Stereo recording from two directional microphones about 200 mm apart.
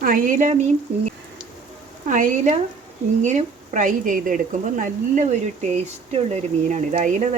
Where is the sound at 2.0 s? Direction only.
40° right (ahead or behind).